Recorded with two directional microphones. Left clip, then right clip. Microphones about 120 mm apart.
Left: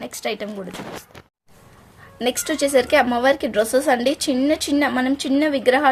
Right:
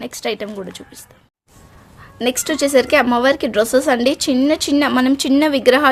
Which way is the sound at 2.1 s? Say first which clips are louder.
Right 3 dB; 25° right (ahead or behind).